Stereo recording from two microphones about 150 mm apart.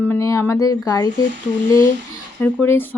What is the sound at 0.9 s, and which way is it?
Speech, 20° left (ahead or behind).